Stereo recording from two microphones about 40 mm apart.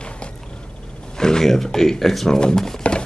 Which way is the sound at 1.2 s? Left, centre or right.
Centre.